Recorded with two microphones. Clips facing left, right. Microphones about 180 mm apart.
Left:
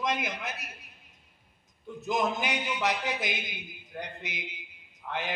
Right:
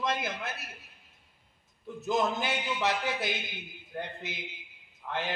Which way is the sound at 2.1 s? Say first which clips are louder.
Even; 15° left (ahead or behind).